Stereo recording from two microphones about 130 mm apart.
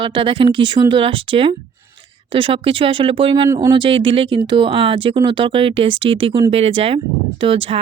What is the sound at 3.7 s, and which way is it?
Speech, 40° right (ahead or behind).